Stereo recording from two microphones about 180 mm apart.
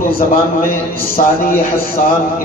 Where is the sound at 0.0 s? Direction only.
55° left (ahead or behind).